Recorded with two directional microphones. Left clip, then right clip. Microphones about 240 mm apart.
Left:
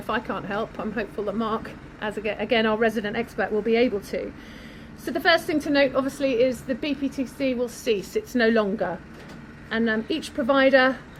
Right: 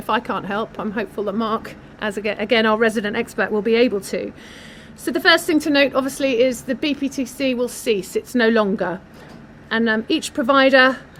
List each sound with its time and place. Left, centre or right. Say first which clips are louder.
0.1 s speech: right 6 dB; right